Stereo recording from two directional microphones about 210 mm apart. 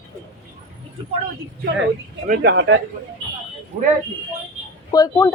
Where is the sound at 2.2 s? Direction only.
40° right (ahead or behind).